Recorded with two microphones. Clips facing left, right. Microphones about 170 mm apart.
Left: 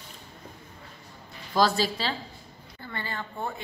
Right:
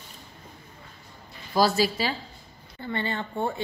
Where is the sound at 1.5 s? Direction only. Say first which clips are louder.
Right 2 dB; 10° right (ahead or behind).